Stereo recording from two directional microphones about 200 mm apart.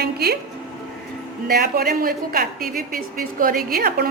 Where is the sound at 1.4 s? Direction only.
50° right (ahead or behind).